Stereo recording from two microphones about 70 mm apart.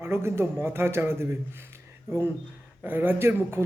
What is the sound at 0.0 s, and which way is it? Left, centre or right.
A man's voice, right.